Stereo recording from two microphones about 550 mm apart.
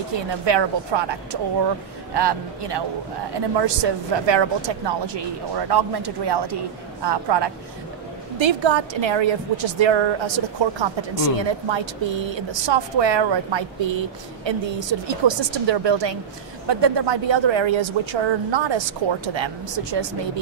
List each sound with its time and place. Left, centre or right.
0.5 s a woman's voice: right